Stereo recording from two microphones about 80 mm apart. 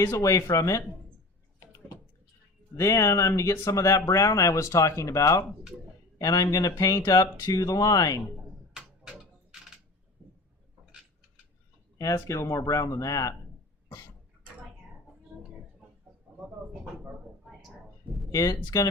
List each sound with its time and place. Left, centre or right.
0.0 s speech: left
2.7 s speech: left
8.7 s a sound: centre
11.9 s speech: left
15.3 s a sound: right
18.3 s speech: left